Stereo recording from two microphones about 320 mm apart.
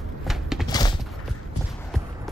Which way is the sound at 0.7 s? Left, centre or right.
Centre.